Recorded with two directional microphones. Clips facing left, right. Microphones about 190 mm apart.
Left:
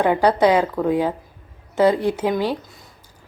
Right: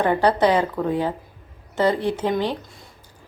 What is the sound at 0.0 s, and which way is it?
A woman's voice, 10° left (ahead or behind).